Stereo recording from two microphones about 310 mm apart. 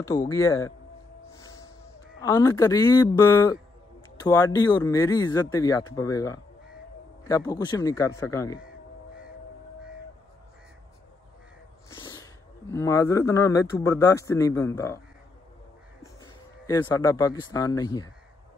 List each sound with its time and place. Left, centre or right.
0.0 s speech: centre
2.2 s speech: centre
11.9 s speech: centre
16.0 s speech: centre